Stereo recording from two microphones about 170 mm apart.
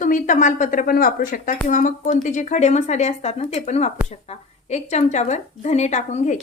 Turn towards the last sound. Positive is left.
turn(degrees=45)  # may be behind; listen again after turning